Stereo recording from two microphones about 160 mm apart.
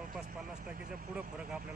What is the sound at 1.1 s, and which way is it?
Speech, 5° right (ahead or behind).